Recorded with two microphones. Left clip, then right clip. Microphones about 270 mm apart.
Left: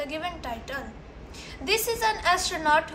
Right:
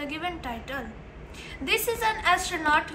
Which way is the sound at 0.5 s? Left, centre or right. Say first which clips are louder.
Left 1 dB; left.